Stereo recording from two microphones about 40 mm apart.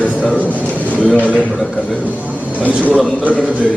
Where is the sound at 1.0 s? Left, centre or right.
Left.